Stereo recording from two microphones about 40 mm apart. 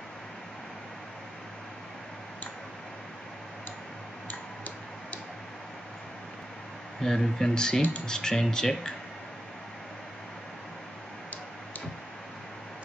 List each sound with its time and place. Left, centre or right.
4.3 s tick-tock: left
7.0 s speech: centre